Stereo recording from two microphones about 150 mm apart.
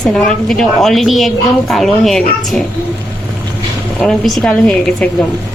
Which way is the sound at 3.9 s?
5° left (ahead or behind).